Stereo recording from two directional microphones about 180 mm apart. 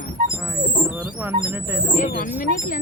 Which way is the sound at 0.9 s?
10° right (ahead or behind).